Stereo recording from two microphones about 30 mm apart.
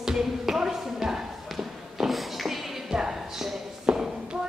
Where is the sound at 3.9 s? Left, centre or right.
Right.